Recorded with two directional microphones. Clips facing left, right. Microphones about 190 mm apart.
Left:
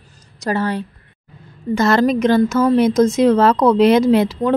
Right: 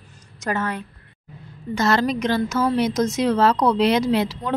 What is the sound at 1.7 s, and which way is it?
A woman's voice, 50° left (ahead or behind).